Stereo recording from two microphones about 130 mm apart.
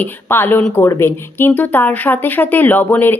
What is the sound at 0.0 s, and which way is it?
Speech, 15° left (ahead or behind).